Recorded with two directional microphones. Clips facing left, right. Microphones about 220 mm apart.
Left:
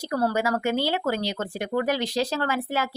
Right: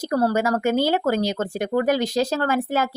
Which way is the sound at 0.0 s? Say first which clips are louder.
Right 4 dB; 40° right (ahead or behind).